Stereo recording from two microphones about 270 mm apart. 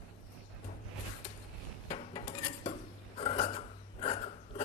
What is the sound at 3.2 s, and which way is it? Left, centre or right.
Filing, left.